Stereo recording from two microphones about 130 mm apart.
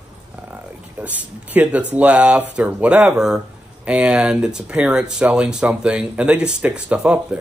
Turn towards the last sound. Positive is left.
turn(degrees=-10)  # may be behind; listen again after turning